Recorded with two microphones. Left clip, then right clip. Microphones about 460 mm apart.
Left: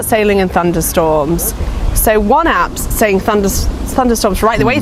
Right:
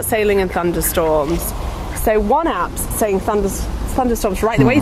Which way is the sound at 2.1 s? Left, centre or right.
Left.